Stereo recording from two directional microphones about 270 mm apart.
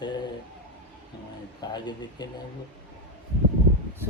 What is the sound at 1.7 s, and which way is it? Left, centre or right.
Speech, centre.